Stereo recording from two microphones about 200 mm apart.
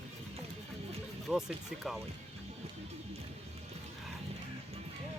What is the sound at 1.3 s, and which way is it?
Speech, centre (ahead or behind).